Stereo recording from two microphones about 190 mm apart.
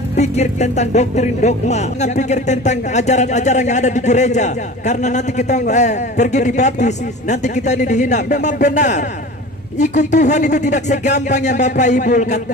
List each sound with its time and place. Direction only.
0.1 s speech: 35° left (ahead or behind)